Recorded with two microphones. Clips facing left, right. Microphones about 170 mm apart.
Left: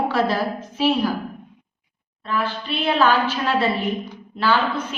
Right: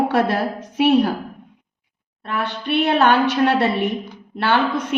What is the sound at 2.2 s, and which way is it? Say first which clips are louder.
A woman's voice: right 1 dB; 70° right (ahead or behind).